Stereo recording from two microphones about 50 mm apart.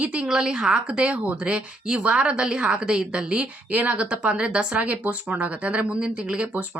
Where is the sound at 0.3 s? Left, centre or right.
Centre.